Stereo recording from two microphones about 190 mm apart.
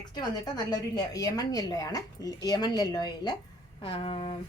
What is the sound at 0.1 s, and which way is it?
A woman's voice, 20° left (ahead or behind).